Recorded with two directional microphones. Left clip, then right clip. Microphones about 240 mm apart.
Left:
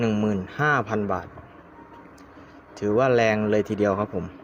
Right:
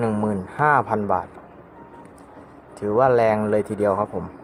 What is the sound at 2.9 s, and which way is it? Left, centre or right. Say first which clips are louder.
Speech: right 3 dB; left.